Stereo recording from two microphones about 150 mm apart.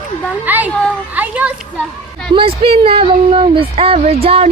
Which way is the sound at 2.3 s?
40° right (ahead or behind).